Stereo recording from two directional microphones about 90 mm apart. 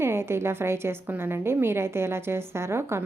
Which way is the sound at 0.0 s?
30° right (ahead or behind).